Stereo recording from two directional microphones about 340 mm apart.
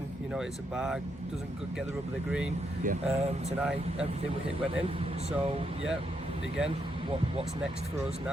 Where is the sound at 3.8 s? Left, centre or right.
Centre.